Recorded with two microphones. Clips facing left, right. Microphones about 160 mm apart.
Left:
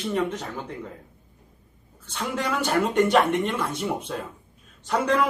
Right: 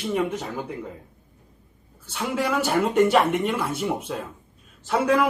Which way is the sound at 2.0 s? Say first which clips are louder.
Right 3 dB; 5° right (ahead or behind).